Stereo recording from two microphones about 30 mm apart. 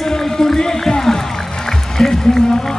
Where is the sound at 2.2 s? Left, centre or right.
Left.